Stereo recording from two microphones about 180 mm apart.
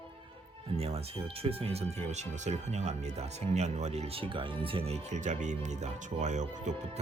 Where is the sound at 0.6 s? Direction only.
35° right (ahead or behind).